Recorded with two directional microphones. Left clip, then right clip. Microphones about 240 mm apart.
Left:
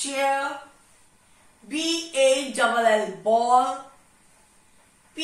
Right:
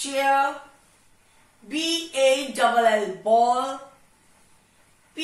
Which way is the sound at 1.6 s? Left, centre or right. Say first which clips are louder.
Right 1 dB; centre.